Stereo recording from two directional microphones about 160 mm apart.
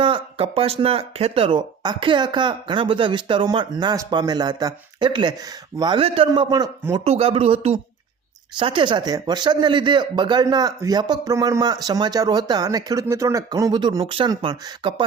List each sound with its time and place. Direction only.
0.0 s speech: 35° right (ahead or behind)
7.0 s speech: 40° right (ahead or behind)